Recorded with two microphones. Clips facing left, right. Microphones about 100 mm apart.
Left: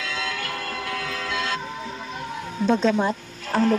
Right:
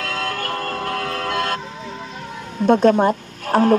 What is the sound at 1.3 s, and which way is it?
Music, 50° right (ahead or behind).